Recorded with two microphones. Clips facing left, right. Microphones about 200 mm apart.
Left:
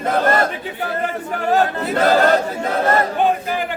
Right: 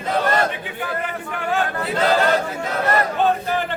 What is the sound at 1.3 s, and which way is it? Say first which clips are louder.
Speech: left 5 dB; 40° left (ahead or behind).